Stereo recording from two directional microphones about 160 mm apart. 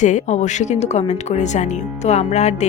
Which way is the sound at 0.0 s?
50° left (ahead or behind).